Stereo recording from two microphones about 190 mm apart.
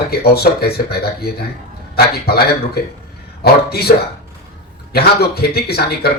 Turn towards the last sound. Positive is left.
turn(degrees=55)  # may be behind; listen again after turning